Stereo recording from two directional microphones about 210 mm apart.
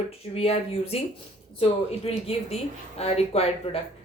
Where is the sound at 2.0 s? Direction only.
30° left (ahead or behind).